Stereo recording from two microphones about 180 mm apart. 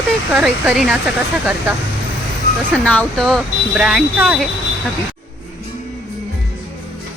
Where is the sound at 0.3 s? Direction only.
Centre (ahead or behind).